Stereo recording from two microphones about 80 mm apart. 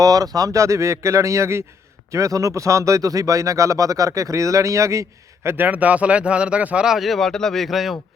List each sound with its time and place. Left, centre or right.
0.0 s speech: right
5.6 s speech: centre